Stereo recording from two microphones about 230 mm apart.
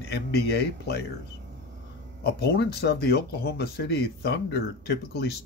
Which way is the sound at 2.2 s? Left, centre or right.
Left.